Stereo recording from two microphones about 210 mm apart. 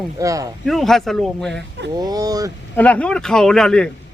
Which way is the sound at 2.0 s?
20° right (ahead or behind).